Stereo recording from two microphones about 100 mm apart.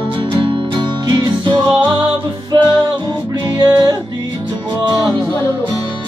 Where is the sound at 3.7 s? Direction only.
40° right (ahead or behind).